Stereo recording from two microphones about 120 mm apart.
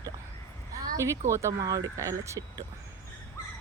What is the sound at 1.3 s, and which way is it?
Speech, 25° right (ahead or behind).